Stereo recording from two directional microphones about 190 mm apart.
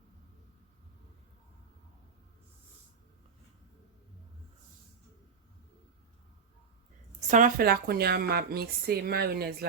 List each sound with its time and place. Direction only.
7.3 s speech: 45° right (ahead or behind)